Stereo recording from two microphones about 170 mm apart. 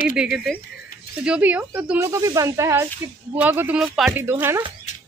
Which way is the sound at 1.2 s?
5° right (ahead or behind).